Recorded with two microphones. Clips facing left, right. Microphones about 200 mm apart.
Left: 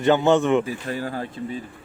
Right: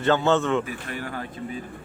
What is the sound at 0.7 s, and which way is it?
Speech, 30° left (ahead or behind).